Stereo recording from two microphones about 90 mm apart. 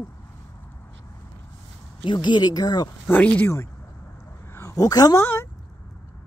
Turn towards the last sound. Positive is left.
turn(degrees=25)  # may be behind; listen again after turning